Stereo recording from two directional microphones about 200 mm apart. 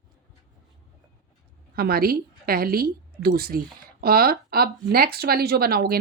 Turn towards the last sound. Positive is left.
turn(degrees=-50)  # may be behind; listen again after turning